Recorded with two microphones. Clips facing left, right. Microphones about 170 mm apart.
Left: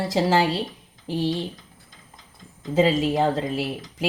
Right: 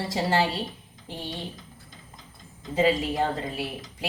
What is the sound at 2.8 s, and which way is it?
Speech, 90° left.